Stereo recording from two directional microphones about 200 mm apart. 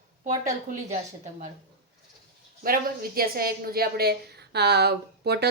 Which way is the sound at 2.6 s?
45° right (ahead or behind).